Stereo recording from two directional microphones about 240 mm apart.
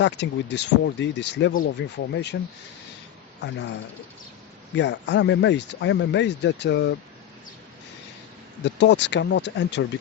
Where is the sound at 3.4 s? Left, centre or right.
Left.